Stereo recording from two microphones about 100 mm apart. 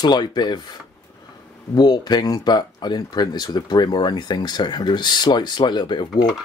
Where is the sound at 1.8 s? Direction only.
45° left (ahead or behind).